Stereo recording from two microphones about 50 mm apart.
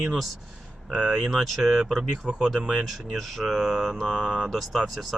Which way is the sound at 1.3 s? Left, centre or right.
Centre.